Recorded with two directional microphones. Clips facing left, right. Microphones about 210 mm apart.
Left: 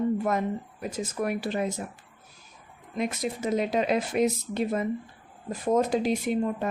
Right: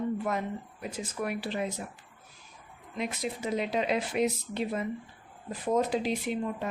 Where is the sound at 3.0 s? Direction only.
45° left (ahead or behind).